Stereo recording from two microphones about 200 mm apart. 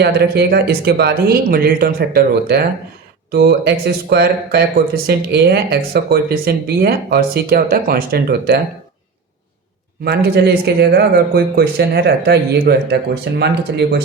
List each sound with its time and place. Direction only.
0.0 s speech: 55° right (ahead or behind)
10.0 s speech: 50° right (ahead or behind)